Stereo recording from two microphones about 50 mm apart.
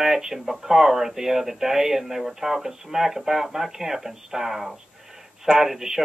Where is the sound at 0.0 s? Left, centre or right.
Centre.